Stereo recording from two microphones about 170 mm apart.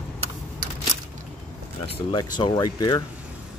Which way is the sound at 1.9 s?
25° left (ahead or behind).